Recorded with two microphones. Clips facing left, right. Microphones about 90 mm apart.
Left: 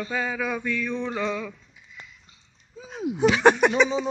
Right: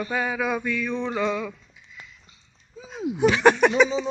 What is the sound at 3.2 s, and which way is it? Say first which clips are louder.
Speech: even; 20° left (ahead or behind).